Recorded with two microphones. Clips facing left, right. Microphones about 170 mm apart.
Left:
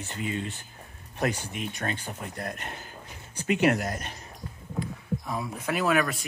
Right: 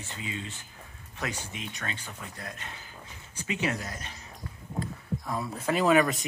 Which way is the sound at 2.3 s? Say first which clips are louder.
Left 6 dB; 55° left (ahead or behind).